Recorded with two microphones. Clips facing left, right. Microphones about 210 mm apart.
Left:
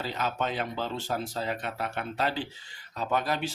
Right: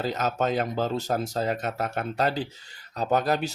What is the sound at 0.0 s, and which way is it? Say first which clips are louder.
Speech: right 5 dB; 45° right (ahead or behind).